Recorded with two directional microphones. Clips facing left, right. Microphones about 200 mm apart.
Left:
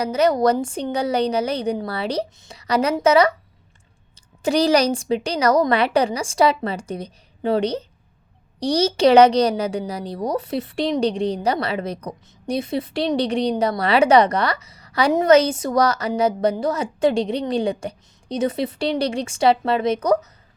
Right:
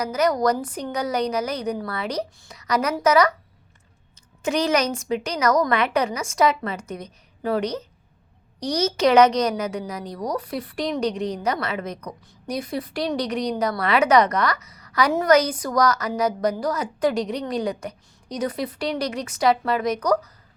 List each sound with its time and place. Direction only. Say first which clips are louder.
0.0 s a woman's voice: left 3 dB; 30° left (ahead or behind)
4.4 s a woman's voice: left 4 dB; 35° left (ahead or behind)